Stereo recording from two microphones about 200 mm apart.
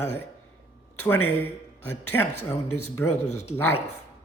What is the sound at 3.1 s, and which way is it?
Speech, 35° left (ahead or behind).